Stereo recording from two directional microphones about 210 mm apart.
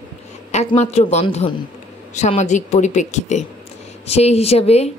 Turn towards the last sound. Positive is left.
turn(degrees=30)  # may be behind; listen again after turning